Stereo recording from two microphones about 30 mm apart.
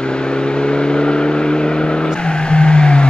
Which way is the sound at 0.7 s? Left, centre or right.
Left.